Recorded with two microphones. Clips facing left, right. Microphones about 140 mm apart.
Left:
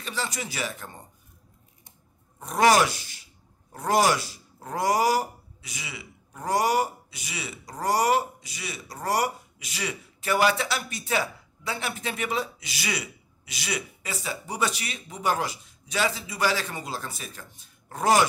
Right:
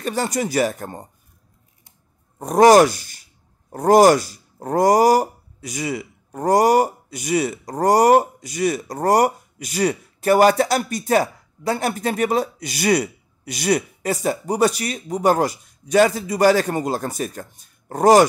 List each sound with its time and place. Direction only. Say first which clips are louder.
0.0 s speech: right 10 dB; 50° right (ahead or behind)
2.3 s speech: right 9 dB; 45° right (ahead or behind)